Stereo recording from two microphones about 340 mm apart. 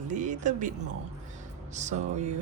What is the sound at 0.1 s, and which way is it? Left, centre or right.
Speech, right.